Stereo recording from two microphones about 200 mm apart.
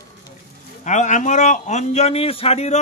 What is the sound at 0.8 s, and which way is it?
A man's voice, 40° left (ahead or behind).